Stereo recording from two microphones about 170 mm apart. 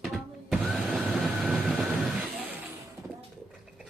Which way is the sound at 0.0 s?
Centre (ahead or behind).